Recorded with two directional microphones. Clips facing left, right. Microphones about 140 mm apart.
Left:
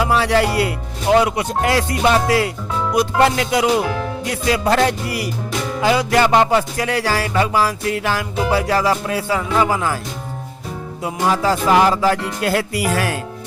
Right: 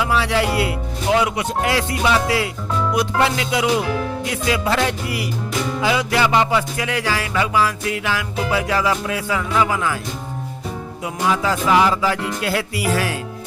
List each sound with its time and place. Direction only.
0.0 s speech: 45° left (ahead or behind)
4.4 s music: 45° left (ahead or behind)
11.0 s speech: 35° left (ahead or behind)